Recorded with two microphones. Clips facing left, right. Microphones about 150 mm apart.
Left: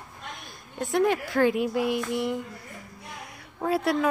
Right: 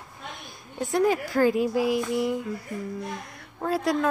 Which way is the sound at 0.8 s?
Centre (ahead or behind).